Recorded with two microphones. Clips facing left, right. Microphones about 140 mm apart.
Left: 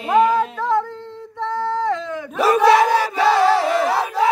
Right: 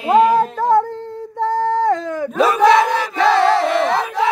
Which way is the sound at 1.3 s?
40° right (ahead or behind).